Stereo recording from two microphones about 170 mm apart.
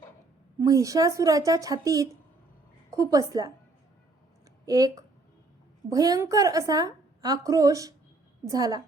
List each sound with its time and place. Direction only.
0.6 s a woman's voice: 20° right (ahead or behind)
4.6 s a woman's voice: 20° right (ahead or behind)